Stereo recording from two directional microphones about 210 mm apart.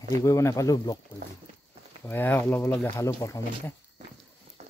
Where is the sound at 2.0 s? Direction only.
10° left (ahead or behind).